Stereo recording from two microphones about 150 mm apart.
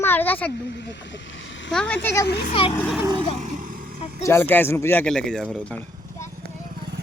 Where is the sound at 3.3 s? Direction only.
55° right (ahead or behind).